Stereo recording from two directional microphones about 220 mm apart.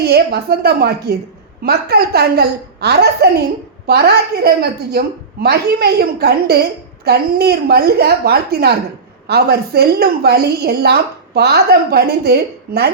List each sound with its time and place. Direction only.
0.0 s a woman's voice: 45° right (ahead or behind)